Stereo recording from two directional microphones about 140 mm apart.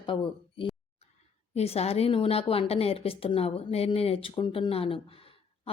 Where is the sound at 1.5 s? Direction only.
50° left (ahead or behind).